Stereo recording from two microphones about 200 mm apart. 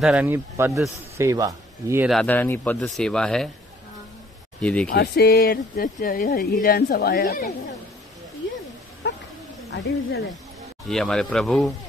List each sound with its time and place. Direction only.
0.0 s speech: 5° right (ahead or behind)
2.0 s speech: 5° left (ahead or behind)
4.6 s speech: 5° left (ahead or behind)
4.8 s speech: 55° left (ahead or behind)
9.0 s a sound: 55° left (ahead or behind)
9.7 s speech: 60° left (ahead or behind)
10.9 s speech: 5° left (ahead or behind)